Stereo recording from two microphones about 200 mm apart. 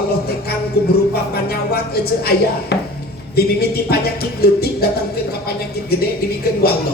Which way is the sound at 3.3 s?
50° left (ahead or behind).